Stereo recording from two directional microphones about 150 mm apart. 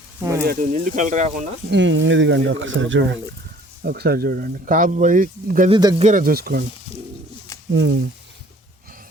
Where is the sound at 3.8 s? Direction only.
90° right; by 5.7 s 65° right (ahead or behind).